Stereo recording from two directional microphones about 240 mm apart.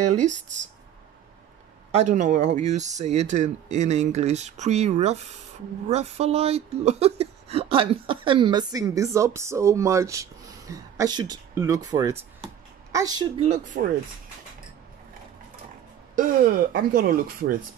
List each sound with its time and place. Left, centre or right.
0.0 s speech: right
1.9 s speech: right
16.2 s speech: right